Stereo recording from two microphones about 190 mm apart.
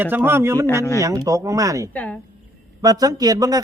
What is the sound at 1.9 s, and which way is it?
Speech, 10° left (ahead or behind).